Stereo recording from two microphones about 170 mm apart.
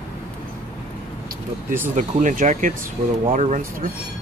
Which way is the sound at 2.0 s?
50° right (ahead or behind).